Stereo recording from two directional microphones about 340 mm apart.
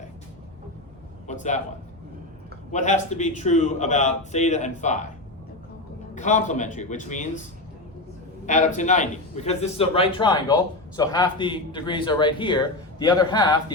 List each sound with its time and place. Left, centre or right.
1.3 s a man's voice: left
2.7 s a man's voice: left
6.1 s a man's voice: left
8.4 s a man's voice: left